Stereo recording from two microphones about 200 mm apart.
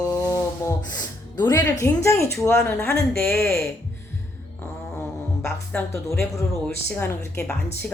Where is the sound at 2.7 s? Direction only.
5° left (ahead or behind).